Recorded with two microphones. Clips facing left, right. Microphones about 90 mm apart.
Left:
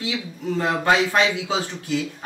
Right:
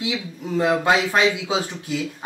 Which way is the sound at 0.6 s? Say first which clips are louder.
Right 1 dB; 15° right (ahead or behind).